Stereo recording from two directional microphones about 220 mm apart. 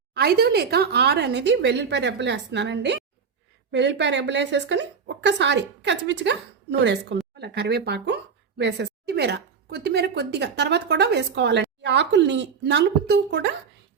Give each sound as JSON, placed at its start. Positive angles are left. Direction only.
{"t": 0.1, "sound": "speech", "side_deg": -45}